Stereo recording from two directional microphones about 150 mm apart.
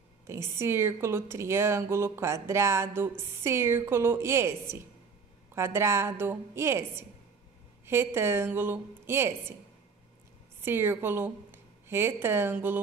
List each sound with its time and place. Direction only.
0.3 s a woman's voice: 15° right (ahead or behind)
10.6 s speech: 15° right (ahead or behind)